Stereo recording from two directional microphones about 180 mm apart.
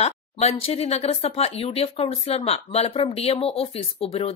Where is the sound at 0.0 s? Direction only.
35° left (ahead or behind).